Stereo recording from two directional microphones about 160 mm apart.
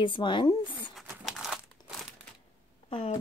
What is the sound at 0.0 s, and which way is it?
Speech, 30° left (ahead or behind).